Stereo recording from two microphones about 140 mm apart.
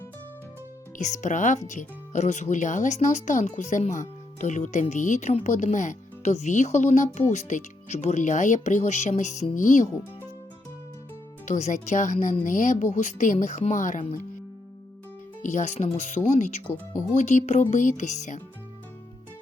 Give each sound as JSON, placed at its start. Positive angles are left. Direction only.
{"t": 0.9, "sound": "speech", "side_deg": 60}
{"t": 11.4, "sound": "speech", "side_deg": 60}
{"t": 15.4, "sound": "speech", "side_deg": 60}